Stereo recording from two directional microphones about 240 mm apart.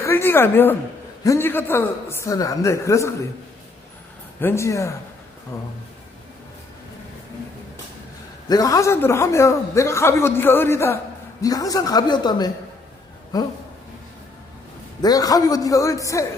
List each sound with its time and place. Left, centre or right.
0.0 s a man's voice: centre
4.4 s a man's voice: centre
8.4 s a man's voice: centre
15.0 s a man's voice: centre